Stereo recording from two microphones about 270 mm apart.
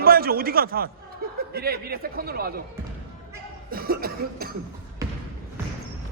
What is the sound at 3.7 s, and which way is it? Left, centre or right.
Speech, right.